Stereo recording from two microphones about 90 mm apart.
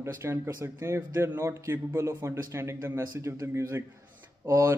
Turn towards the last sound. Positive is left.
turn(degrees=-35)  # may be behind; listen again after turning